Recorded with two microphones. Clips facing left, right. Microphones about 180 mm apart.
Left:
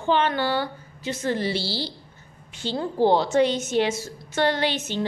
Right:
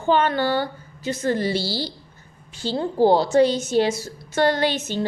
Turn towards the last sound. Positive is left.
turn(degrees=-40)  # may be behind; listen again after turning